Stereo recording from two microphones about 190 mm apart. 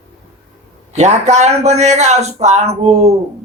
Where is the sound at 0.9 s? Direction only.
35° right (ahead or behind).